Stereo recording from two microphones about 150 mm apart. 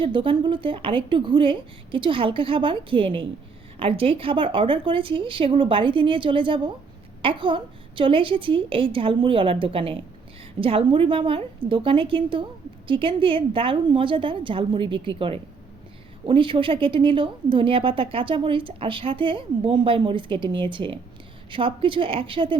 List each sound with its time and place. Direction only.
0.0 s a woman's voice: 35° right (ahead or behind)